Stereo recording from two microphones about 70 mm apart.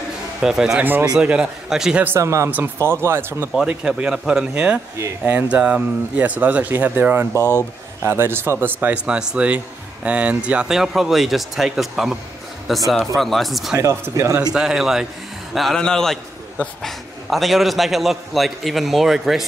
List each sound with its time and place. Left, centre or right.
0.4 s a man's voice: centre
2.1 s speech: right
3.5 s speech: centre
7.3 s speech: left
8.0 s speech: right
8.9 s speech: centre
10.8 s a man's voice: centre
13.7 s speech: right
14.5 s a man's voice: centre